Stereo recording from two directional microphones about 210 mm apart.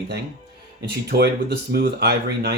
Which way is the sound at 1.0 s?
50° right (ahead or behind).